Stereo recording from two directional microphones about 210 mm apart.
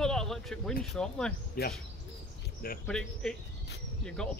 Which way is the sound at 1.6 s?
45° left (ahead or behind).